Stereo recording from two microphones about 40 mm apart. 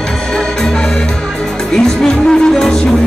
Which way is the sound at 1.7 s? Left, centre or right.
Centre.